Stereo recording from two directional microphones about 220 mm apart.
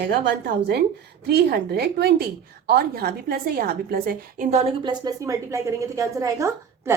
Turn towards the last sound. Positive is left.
turn(degrees=-15)  # may be behind; listen again after turning